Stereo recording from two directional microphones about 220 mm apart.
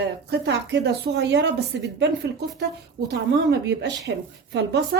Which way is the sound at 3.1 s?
50° right (ahead or behind).